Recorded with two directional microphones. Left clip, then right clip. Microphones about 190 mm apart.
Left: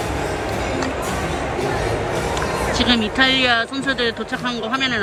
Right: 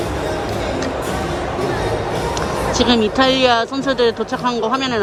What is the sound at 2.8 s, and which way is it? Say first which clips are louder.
Speech: right 3 dB; 25° right (ahead or behind).